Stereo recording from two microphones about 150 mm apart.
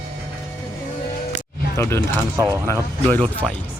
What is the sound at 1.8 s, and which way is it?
Speech, 15° left (ahead or behind).